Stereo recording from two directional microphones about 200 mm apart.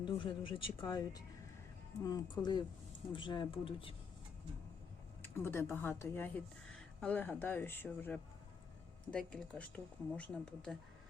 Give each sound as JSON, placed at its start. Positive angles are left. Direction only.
{"t": 0.0, "sound": "speech", "side_deg": 25}
{"t": 5.2, "sound": "speech", "side_deg": 10}